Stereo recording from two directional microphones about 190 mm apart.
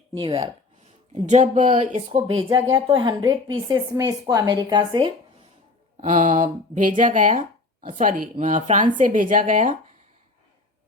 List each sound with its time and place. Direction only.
0.1 s a woman's voice: 25° right (ahead or behind)
1.1 s speech: 35° right (ahead or behind)
2.5 s a woman's voice: 25° right (ahead or behind)
6.0 s speech: 40° right (ahead or behind)